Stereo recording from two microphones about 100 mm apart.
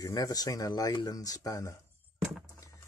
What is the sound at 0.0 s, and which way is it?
Speech, 35° left (ahead or behind).